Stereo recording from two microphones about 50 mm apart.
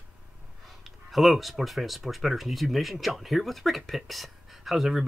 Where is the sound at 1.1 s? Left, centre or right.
Centre.